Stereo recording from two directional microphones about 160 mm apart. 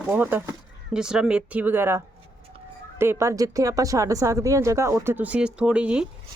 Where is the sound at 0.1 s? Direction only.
15° right (ahead or behind).